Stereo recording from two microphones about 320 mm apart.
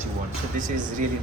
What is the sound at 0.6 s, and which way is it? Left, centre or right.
Speech, right.